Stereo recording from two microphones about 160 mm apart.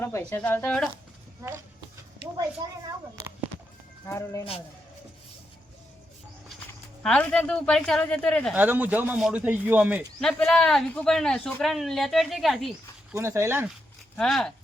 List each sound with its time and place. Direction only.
0.0 s speech: 15° left (ahead or behind)
1.4 s speech: 15° right (ahead or behind)
2.6 s a woman's voice: 25° right (ahead or behind)
4.0 s speech: 20° left (ahead or behind)
7.0 s speech: 5° left (ahead or behind)
8.5 s speech: 10° right (ahead or behind)
10.2 s speech: 5° left (ahead or behind)
13.1 s speech: 15° right (ahead or behind)
14.2 s speech: 5° left (ahead or behind)